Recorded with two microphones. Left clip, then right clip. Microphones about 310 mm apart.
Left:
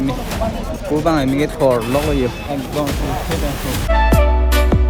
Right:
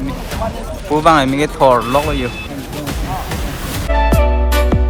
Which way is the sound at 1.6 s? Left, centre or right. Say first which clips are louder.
Right 5 dB; centre.